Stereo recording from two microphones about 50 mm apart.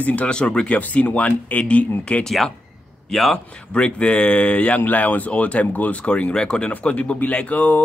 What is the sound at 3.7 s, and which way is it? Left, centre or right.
Speech, centre.